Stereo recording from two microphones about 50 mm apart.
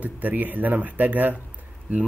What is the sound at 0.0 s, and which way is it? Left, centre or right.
Speech, right.